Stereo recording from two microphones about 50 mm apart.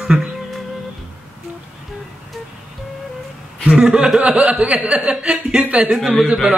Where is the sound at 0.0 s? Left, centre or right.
Centre.